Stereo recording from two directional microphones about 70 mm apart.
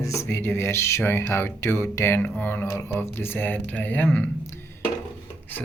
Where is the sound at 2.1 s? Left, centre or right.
Left.